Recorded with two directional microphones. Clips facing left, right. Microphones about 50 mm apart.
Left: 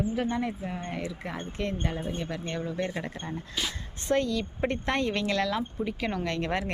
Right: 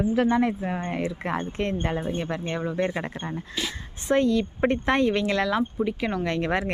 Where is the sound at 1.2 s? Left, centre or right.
Right.